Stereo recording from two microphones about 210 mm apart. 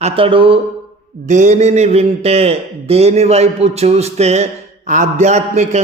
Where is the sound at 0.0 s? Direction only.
25° right (ahead or behind).